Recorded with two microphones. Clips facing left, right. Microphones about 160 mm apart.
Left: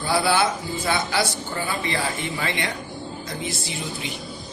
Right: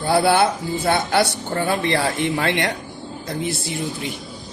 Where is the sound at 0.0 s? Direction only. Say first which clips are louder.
Right 5 dB; 55° right (ahead or behind).